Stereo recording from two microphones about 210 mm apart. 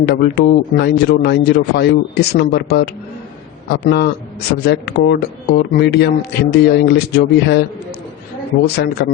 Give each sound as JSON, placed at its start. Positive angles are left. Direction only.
{"t": 0.0, "sound": "speech", "side_deg": 50}
{"t": 8.6, "sound": "speech", "side_deg": 50}